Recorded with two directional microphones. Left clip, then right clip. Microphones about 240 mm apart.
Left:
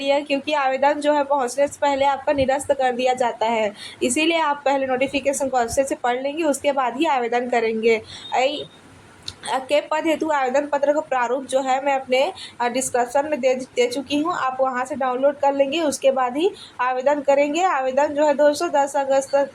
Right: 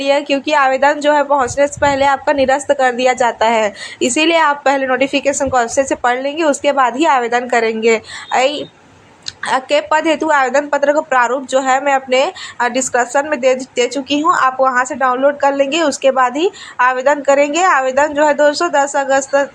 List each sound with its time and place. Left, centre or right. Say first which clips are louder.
0.0 s a woman's voice: right 6 dB; centre